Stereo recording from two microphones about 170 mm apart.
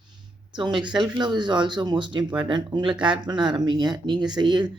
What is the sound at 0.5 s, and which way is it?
Speech, 25° right (ahead or behind).